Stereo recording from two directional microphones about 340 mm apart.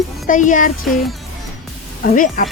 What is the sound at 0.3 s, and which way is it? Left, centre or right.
Speech, left.